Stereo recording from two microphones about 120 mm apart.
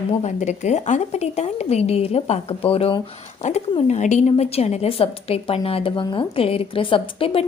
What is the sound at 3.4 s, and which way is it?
A woman's voice, 85° left.